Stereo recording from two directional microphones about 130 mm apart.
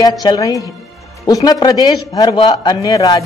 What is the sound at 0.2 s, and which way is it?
A woman's voice, 30° left (ahead or behind).